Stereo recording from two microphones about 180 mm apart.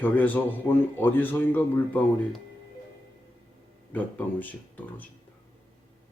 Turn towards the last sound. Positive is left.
turn(degrees=10)  # may be behind; listen again after turning